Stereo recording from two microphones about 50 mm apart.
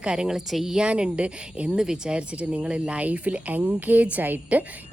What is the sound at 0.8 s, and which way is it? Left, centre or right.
A woman's voice, right.